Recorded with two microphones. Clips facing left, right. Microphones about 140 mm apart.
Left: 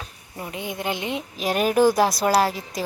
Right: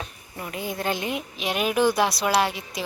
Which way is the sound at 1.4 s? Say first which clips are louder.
Left 4 dB; 40° left (ahead or behind).